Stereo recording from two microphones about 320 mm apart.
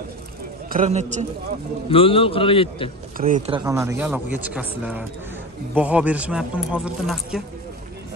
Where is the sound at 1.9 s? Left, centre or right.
Centre.